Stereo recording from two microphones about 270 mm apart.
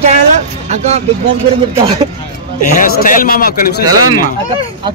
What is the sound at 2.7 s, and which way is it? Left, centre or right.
A man's voice, left.